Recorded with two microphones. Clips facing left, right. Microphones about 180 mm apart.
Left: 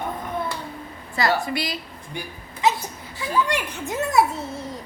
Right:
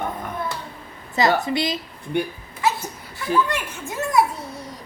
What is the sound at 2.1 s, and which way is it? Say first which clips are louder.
Speech: right 11 dB; 65° right (ahead or behind).